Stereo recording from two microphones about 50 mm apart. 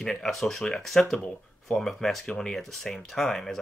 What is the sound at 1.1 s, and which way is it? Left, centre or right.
Speech, left.